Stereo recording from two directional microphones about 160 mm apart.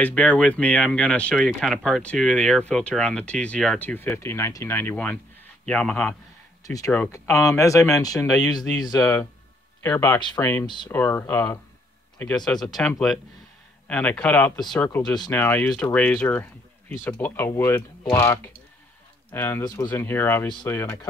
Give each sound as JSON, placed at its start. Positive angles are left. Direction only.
{"t": 0.0, "sound": "speech", "side_deg": 10}
{"t": 6.6, "sound": "speech", "side_deg": 20}
{"t": 10.9, "sound": "speech", "side_deg": 10}